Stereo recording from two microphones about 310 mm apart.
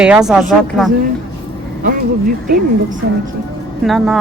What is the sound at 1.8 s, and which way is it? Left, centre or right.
Speech, right.